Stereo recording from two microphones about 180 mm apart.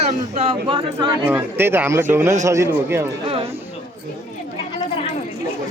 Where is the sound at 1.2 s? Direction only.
10° right (ahead or behind).